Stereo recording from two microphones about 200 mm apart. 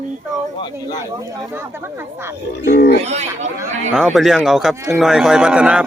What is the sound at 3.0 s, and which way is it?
Speech, 35° right (ahead or behind).